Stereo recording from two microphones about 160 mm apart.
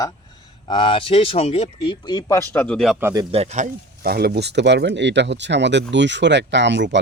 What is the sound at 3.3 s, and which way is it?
Speech, 40° right (ahead or behind).